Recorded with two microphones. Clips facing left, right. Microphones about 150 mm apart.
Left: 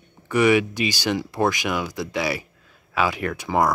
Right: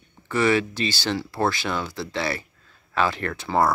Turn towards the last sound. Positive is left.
turn(degrees=15)  # may be behind; listen again after turning